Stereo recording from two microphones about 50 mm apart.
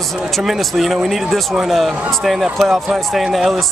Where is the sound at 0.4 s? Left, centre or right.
Centre.